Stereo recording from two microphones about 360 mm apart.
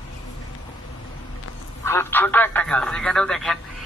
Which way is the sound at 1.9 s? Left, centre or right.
Centre.